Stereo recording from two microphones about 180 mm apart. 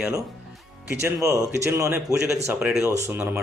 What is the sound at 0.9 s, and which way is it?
Speech, 15° right (ahead or behind).